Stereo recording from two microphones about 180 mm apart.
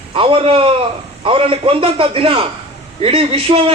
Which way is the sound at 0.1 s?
30° right (ahead or behind).